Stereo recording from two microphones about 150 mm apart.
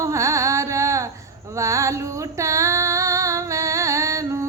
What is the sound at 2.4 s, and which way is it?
Music, 20° right (ahead or behind).